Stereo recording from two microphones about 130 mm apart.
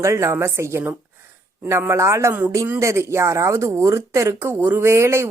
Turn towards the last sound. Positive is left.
turn(degrees=-20)  # may be behind; listen again after turning